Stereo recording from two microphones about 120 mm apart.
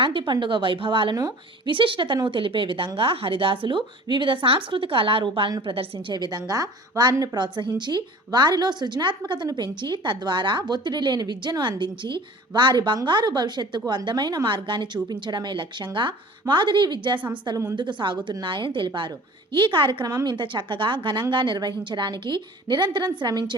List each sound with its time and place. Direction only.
0.0 s a woman's voice: 40° right (ahead or behind)